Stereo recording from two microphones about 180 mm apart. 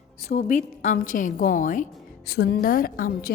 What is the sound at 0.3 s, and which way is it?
A woman's voice, 40° left (ahead or behind).